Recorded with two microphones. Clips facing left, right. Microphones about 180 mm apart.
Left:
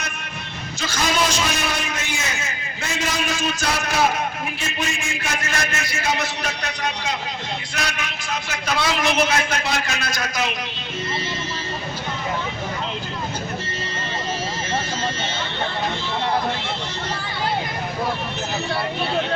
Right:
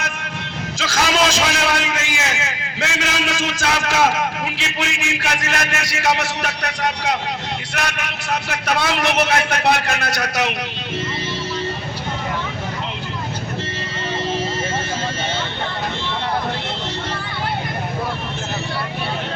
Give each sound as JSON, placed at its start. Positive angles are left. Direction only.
{"t": 0.8, "sound": "a man's voice", "side_deg": -90}
{"t": 7.7, "sound": "a man's voice", "side_deg": -60}